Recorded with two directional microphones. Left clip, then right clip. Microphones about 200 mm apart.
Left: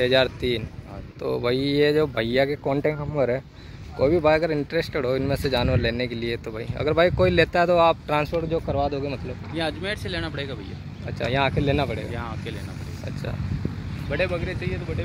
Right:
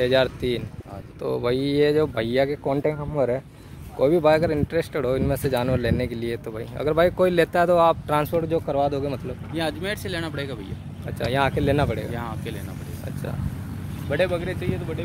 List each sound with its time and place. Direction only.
0.0 s speech: centre (ahead or behind)
9.5 s speech: 50° right (ahead or behind)
11.1 s speech: centre (ahead or behind)
12.1 s speech: 45° right (ahead or behind)
14.1 s speech: 40° right (ahead or behind)